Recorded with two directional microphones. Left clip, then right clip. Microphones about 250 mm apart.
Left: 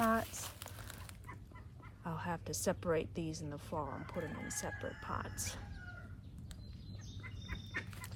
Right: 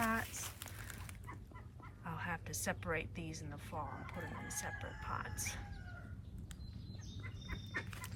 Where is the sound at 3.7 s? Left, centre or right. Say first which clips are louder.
Left 4 dB; left.